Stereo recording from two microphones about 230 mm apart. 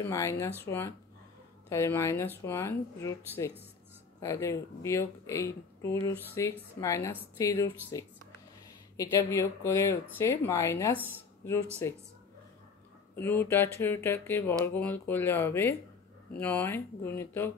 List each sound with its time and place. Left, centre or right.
0.0 s speech: centre
13.1 s speech: centre